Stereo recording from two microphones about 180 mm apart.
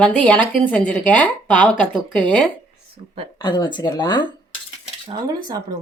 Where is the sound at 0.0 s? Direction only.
5° left (ahead or behind).